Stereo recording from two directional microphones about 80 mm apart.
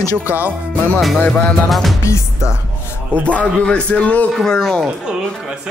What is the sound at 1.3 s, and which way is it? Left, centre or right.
Speech, centre.